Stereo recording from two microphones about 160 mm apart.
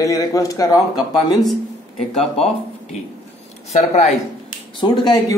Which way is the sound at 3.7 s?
45° left (ahead or behind).